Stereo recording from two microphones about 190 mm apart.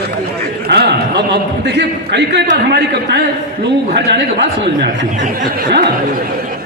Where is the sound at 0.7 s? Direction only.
60° right (ahead or behind).